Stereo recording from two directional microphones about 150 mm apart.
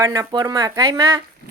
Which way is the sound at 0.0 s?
25° right (ahead or behind).